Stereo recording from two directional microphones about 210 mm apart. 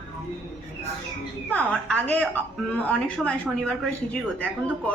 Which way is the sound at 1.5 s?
5° left (ahead or behind).